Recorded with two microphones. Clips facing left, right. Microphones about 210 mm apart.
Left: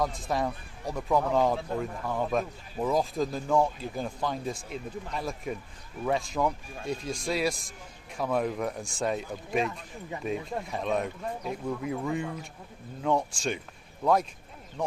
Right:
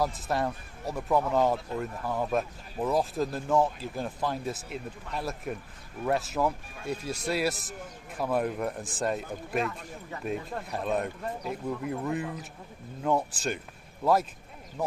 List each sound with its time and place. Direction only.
0.0 s speech: 5° right (ahead or behind)